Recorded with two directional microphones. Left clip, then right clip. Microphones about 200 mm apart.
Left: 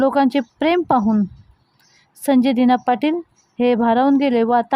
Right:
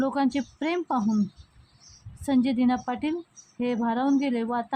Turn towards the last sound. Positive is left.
turn(degrees=35)  # may be behind; listen again after turning